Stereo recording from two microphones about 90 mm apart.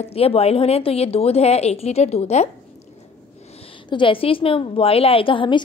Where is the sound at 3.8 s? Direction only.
70° left (ahead or behind).